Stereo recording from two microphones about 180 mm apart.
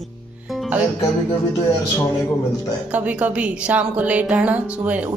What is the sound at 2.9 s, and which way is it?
A woman's voice, 10° right (ahead or behind).